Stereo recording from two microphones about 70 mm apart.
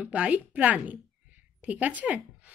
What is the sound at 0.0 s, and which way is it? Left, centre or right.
A woman's voice, centre.